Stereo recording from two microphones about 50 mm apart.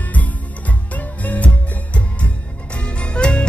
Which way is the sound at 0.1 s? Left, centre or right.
Left.